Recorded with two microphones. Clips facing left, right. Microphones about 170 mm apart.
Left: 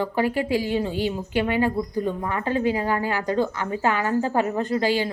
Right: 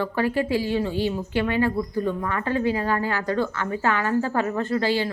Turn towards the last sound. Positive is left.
turn(degrees=15)  # may be behind; listen again after turning